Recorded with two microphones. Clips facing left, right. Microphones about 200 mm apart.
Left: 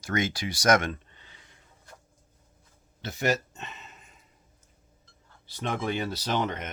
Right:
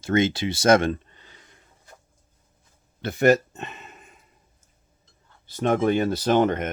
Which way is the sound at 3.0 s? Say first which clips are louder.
Right 9 dB; 55° right (ahead or behind).